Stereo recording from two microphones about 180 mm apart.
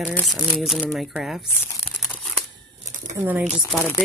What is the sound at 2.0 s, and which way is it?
Tearing, centre (ahead or behind).